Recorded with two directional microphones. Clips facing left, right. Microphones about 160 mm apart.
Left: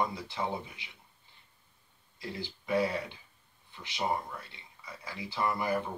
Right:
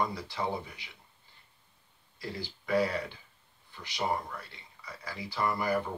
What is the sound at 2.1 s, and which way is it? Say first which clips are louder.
Speech: right 1 dB; 20° left (ahead or behind).